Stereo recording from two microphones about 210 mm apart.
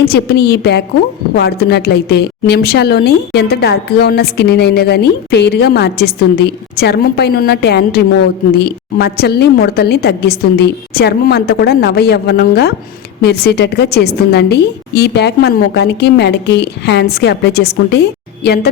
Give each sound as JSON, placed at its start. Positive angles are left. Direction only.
{"t": 0.0, "sound": "a woman's voice", "side_deg": 50}